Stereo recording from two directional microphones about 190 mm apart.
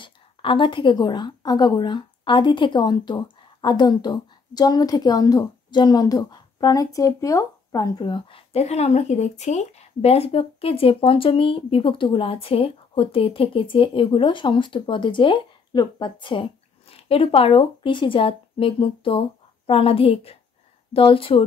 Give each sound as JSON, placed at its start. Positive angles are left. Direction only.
{"t": 0.0, "sound": "speech", "side_deg": 25}